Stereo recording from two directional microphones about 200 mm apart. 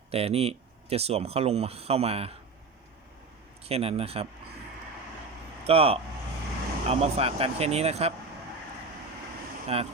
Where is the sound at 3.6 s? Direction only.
30° right (ahead or behind).